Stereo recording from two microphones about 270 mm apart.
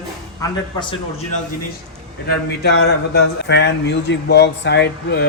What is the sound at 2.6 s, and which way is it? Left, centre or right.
Speech, left.